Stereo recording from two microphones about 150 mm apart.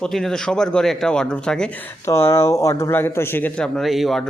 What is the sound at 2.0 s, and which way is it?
Speech, 20° left (ahead or behind).